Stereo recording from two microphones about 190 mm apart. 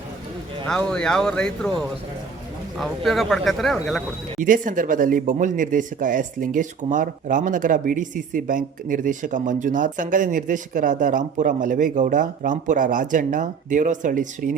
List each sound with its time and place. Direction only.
0.6 s speech: 5° left (ahead or behind)
2.7 s speech: centre (ahead or behind)
4.4 s speech: 45° right (ahead or behind)